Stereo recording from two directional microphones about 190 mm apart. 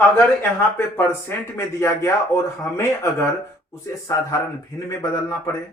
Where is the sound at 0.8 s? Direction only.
10° left (ahead or behind).